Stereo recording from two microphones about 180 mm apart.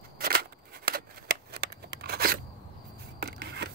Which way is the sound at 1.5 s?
65° right (ahead or behind).